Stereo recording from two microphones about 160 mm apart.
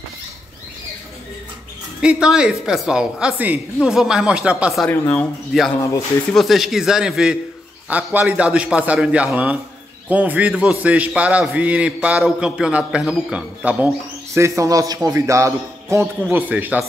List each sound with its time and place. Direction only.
2.0 s a woman's voice: 5° right (ahead or behind)
4.8 s speech: 10° left (ahead or behind)
5.5 s a woman's voice: centre (ahead or behind)
14.3 s a man's voice: 15° right (ahead or behind)